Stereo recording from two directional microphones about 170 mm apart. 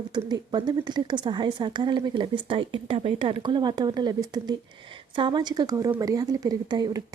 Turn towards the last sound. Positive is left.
turn(degrees=-25)  # may be behind; listen again after turning